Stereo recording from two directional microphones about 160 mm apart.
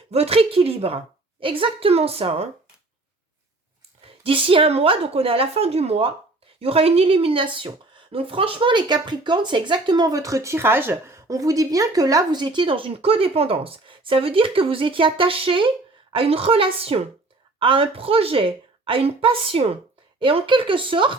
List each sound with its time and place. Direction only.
0.1 s a woman's voice: 35° right (ahead or behind)
4.0 s a woman's voice: 35° right (ahead or behind)